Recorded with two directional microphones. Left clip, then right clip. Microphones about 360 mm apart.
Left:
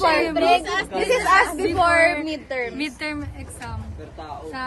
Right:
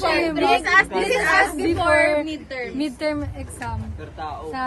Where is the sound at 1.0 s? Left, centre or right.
Left.